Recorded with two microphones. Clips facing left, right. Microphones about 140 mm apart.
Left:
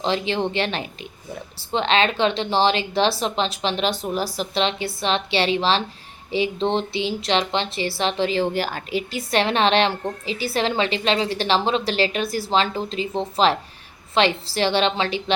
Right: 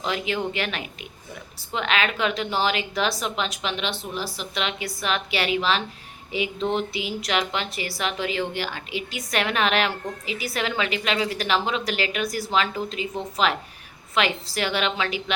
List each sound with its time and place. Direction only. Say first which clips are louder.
0.0 s a woman's voice: left 4 dB; 30° left (ahead or behind)